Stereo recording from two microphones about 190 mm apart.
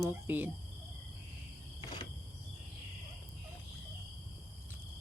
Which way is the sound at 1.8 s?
20° left (ahead or behind).